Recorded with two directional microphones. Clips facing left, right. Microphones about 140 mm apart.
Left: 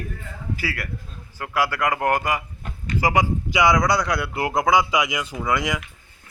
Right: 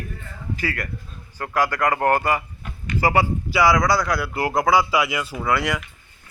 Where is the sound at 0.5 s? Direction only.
10° left (ahead or behind).